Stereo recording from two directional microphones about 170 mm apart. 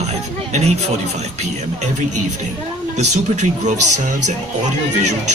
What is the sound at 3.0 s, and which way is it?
Speech, 45° right (ahead or behind).